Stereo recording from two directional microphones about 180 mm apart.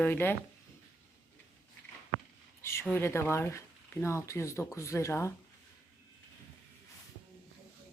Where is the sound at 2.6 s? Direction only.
15° left (ahead or behind).